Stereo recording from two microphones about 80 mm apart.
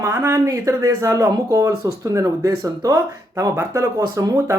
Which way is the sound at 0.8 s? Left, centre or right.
Right.